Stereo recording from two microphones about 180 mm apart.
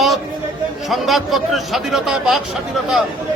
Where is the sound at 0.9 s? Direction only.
Centre (ahead or behind).